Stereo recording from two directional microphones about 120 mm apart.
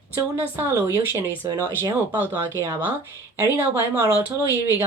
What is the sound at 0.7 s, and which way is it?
Speech, 30° right (ahead or behind).